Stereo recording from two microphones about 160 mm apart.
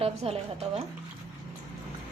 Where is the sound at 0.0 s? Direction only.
40° right (ahead or behind).